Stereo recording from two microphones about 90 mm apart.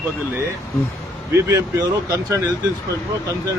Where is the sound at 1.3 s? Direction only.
35° right (ahead or behind).